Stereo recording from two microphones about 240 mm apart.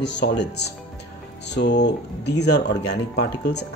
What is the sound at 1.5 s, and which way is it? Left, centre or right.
Speech, left.